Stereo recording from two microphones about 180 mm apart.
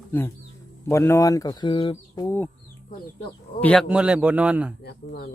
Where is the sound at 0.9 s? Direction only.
15° left (ahead or behind).